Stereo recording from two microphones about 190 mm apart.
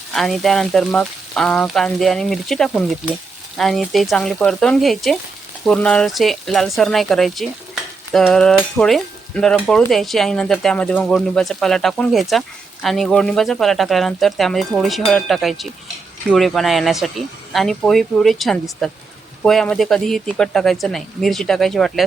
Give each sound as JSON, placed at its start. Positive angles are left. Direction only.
{"t": 0.1, "sound": "stir", "side_deg": 0}